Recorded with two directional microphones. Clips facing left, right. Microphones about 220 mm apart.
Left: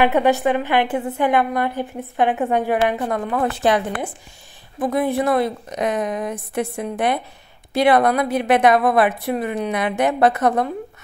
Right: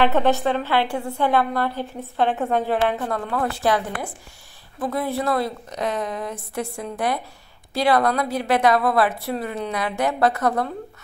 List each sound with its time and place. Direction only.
0.0 s a woman's voice: 15° left (ahead or behind)